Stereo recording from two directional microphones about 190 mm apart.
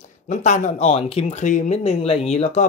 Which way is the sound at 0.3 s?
40° left (ahead or behind).